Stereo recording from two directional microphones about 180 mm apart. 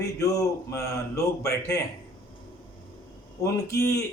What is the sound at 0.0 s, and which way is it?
Speech, 20° left (ahead or behind).